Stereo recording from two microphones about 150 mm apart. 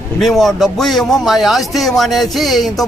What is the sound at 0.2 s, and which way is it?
A man's voice, centre (ahead or behind).